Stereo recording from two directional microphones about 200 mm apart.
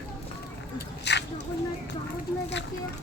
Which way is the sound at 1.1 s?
60° left (ahead or behind).